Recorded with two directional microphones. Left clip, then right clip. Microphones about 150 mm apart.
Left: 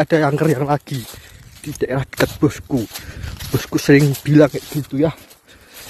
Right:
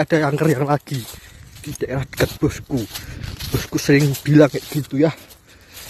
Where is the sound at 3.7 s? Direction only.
25° left (ahead or behind).